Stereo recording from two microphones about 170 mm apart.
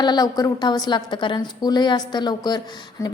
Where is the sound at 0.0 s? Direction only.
25° left (ahead or behind).